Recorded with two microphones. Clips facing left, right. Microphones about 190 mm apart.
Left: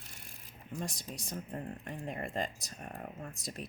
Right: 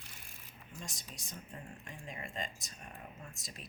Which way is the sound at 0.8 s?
55° left (ahead or behind).